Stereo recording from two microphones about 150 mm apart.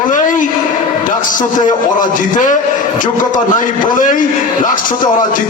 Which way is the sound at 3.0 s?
60° left (ahead or behind).